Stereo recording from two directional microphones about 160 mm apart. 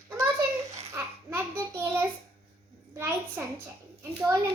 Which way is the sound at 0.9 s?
15° right (ahead or behind).